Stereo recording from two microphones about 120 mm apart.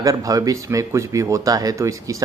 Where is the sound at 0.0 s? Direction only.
30° right (ahead or behind).